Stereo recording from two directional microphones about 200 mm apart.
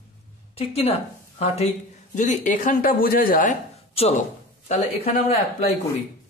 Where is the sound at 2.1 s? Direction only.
40° left (ahead or behind).